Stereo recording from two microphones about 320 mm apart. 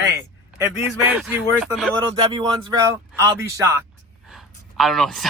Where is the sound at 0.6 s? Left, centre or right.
Centre.